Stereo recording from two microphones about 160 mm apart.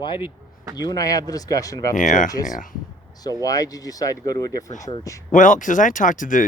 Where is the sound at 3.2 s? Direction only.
20° left (ahead or behind).